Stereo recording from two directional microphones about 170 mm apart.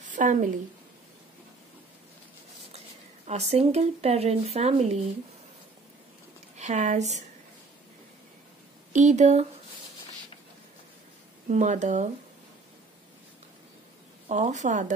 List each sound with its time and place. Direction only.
0.0 s a sound: 45° right (ahead or behind)
3.3 s speech: 40° right (ahead or behind)
6.5 s a woman's voice: 40° right (ahead or behind)
8.9 s speech: 45° right (ahead or behind)
11.4 s speech: 45° right (ahead or behind)
14.3 s speech: 45° right (ahead or behind)